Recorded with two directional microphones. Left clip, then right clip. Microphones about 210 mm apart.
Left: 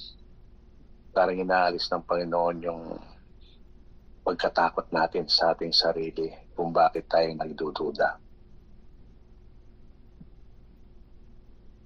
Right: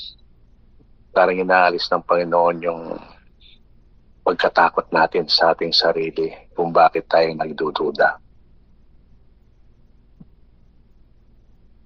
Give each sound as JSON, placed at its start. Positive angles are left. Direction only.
{"t": 1.1, "sound": "speech", "side_deg": -15}
{"t": 4.2, "sound": "speech", "side_deg": -15}